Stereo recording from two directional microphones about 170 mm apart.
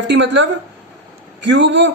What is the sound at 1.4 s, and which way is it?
Speech, 90° right.